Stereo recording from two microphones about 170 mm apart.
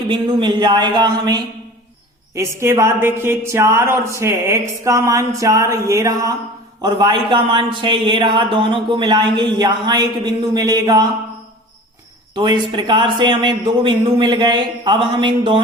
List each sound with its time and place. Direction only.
0.1 s a man's voice: 30° right (ahead or behind)
12.3 s a man's voice: 25° right (ahead or behind)